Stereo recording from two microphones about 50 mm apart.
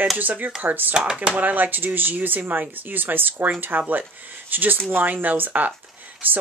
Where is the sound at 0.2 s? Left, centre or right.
Right.